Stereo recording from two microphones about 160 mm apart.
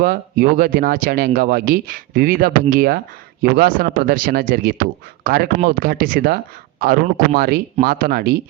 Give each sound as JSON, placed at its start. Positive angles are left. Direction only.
{"t": 0.0, "sound": "speech", "side_deg": -65}